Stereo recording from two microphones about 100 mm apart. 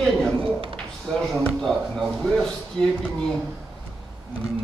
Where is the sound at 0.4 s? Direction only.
60° right (ahead or behind).